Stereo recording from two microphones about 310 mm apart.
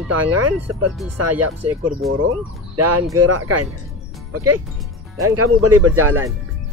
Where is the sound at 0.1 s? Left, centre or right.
Right.